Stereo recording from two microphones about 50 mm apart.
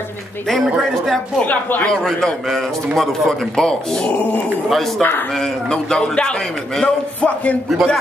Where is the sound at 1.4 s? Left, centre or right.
Left.